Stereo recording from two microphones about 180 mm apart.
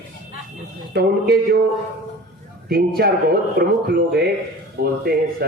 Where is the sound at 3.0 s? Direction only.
60° right (ahead or behind).